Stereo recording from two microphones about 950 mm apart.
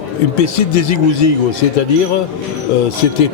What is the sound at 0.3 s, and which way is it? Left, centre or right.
Speech, left.